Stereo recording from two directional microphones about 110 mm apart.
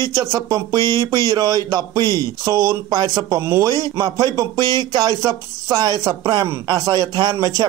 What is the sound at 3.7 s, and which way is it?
Speech, 35° right (ahead or behind).